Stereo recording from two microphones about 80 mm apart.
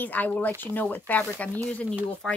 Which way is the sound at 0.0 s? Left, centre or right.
Left.